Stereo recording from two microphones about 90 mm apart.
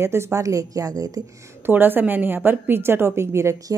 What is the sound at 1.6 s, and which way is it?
A woman's voice, 20° right (ahead or behind).